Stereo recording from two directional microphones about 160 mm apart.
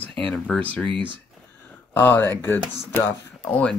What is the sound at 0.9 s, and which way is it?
Speech, 30° right (ahead or behind).